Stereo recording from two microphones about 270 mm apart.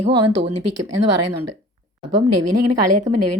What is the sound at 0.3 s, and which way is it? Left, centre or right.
A woman's voice, right.